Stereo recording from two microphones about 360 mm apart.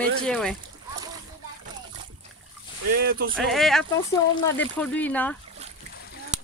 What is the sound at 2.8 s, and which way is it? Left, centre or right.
Speech, right.